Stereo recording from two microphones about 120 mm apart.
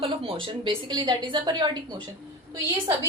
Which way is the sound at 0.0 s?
50° right (ahead or behind).